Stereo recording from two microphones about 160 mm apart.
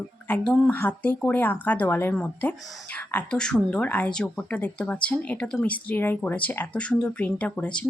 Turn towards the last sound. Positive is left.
turn(degrees=5)  # may be behind; listen again after turning